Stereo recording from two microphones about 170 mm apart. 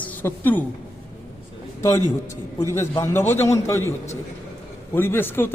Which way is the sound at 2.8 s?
15° left (ahead or behind).